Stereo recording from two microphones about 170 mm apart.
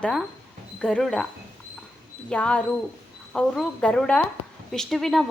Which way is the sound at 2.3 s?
5° left (ahead or behind).